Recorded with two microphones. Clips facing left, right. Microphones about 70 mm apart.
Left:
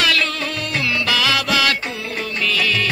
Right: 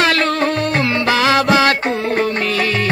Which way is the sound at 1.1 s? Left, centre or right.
Right.